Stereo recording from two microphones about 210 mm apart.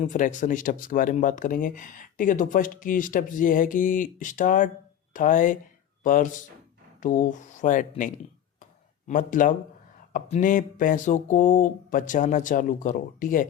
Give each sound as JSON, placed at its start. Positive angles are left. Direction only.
{"t": 0.0, "sound": "speech", "side_deg": 35}